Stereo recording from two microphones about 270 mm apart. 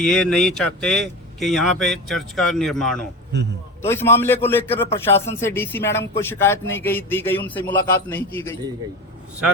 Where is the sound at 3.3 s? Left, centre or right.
Right.